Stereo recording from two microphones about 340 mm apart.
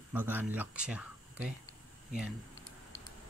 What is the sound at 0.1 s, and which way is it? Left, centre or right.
Speech, centre.